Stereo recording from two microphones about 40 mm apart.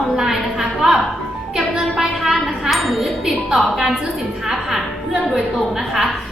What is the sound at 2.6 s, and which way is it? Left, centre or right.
Wind chime, centre.